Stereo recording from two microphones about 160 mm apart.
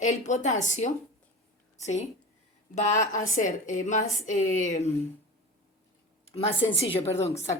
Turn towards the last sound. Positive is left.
turn(degrees=40)  # may be behind; listen again after turning